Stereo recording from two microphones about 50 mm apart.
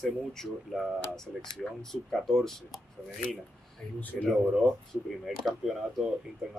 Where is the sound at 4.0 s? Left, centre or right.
Left.